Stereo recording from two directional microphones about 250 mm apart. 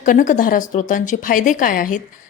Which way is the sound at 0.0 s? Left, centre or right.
Left.